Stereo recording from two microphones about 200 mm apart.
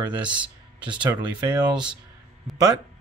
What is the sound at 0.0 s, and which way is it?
Speech, 25° right (ahead or behind).